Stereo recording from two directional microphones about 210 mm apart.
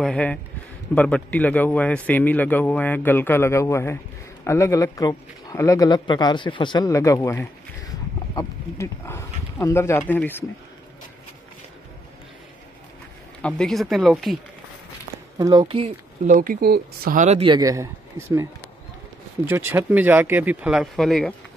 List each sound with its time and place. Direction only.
0.0 s a man's voice: 5° left (ahead or behind)
13.4 s speech: 5° left (ahead or behind)
15.3 s speech: 20° right (ahead or behind)
16.3 s speech: 45° right (ahead or behind); by 18.5 s 15° right (ahead or behind)
19.5 s speech: 10° right (ahead or behind)